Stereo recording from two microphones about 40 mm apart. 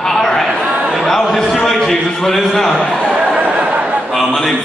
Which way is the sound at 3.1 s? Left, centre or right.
Right.